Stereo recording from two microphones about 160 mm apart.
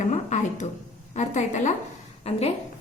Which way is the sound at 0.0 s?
50° left (ahead or behind).